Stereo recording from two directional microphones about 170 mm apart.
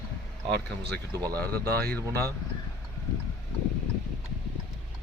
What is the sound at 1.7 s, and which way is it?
Speech, 65° right (ahead or behind).